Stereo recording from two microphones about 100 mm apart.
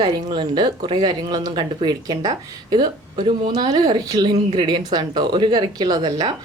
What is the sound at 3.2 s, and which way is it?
Speech, 55° right (ahead or behind).